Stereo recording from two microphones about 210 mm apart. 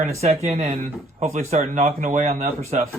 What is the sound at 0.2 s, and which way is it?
Speech, 30° right (ahead or behind).